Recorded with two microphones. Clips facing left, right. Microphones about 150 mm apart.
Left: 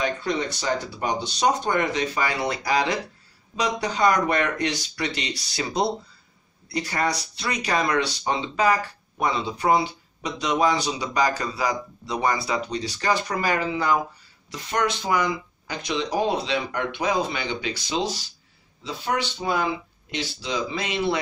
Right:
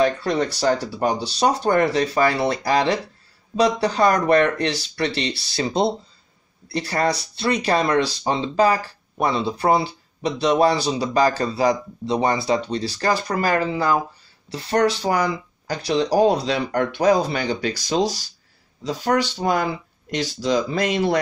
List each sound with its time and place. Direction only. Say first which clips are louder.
0.0 s speech: right 6 dB; 35° right (ahead or behind)